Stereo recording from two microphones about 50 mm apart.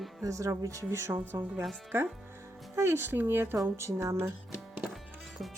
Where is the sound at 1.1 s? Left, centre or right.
Right.